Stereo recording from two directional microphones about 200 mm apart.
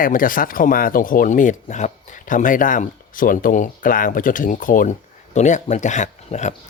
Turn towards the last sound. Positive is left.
turn(degrees=35)  # may be behind; listen again after turning